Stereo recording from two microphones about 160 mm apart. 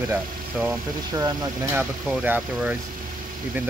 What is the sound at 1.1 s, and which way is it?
Speech, 15° right (ahead or behind).